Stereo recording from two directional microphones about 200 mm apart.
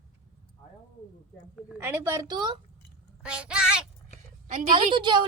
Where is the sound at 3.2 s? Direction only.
5° right (ahead or behind).